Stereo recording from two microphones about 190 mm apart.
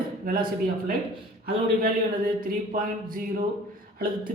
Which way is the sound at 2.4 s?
45° right (ahead or behind).